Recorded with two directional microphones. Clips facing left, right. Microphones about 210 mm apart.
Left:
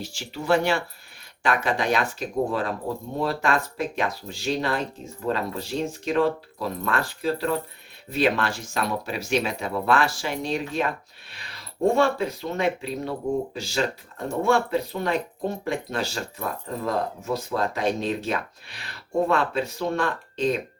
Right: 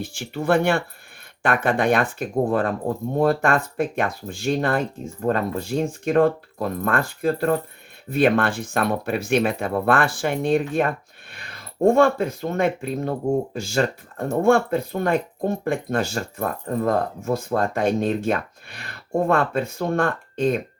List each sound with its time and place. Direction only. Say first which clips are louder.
0.0 s speech: right 7 dB; 55° right (ahead or behind)